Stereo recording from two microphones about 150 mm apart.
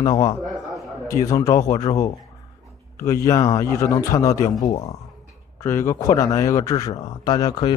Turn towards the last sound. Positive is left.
turn(degrees=30)  # may be behind; listen again after turning